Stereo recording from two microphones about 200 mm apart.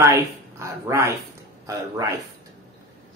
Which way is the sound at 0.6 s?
15° right (ahead or behind).